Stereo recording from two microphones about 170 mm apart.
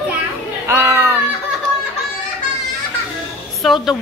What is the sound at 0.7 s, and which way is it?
Music, 15° right (ahead or behind).